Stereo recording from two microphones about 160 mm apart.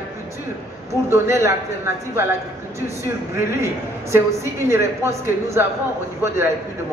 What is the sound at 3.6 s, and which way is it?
A man's voice, 15° right (ahead or behind).